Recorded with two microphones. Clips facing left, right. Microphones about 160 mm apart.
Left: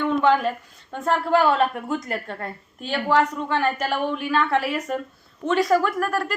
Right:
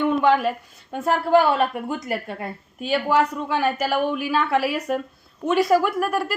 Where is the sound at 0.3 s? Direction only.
5° right (ahead or behind).